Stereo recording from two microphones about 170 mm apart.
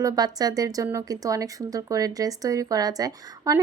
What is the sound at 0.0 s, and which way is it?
Speech, 20° right (ahead or behind).